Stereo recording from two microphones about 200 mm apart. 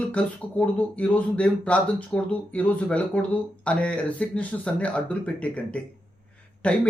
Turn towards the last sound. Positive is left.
turn(degrees=5)  # may be behind; listen again after turning